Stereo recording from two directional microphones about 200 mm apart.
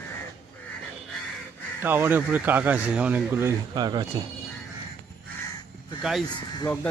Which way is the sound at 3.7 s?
20° right (ahead or behind).